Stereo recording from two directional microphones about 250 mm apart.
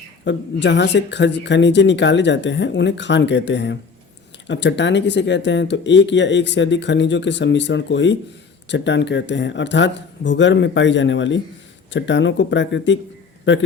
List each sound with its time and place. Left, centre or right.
0.3 s a man's voice: left